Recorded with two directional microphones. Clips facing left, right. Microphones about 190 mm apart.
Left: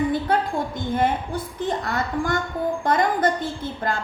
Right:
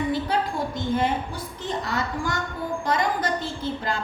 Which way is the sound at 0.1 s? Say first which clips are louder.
Left 3 dB; 50° left (ahead or behind).